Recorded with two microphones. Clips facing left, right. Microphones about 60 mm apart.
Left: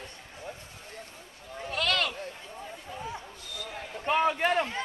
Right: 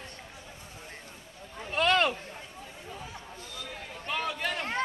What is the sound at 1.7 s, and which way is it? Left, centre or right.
Speech, right.